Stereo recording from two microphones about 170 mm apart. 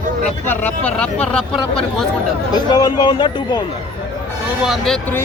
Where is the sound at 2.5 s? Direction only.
25° left (ahead or behind).